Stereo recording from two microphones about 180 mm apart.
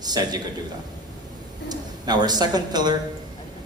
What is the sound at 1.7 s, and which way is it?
Speech, 25° right (ahead or behind).